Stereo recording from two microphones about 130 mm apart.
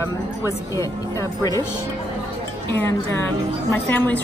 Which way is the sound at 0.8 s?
25° left (ahead or behind).